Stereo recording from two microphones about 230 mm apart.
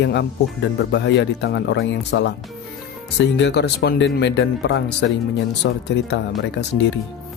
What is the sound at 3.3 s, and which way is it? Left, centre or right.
Speech, left.